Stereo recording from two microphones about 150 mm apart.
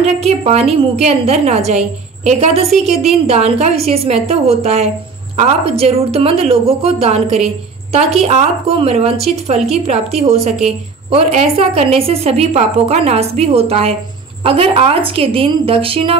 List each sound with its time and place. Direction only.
0.0 s a woman's voice: 45° right (ahead or behind)